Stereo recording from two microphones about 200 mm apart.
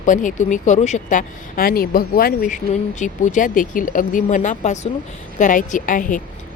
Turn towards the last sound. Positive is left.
turn(degrees=40)  # may be behind; listen again after turning